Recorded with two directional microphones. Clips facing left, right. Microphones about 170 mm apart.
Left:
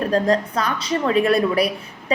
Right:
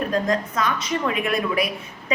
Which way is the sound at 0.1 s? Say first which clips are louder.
Left 4 dB; 35° left (ahead or behind).